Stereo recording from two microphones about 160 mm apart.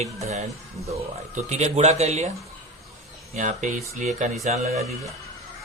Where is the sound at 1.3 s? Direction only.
45° right (ahead or behind).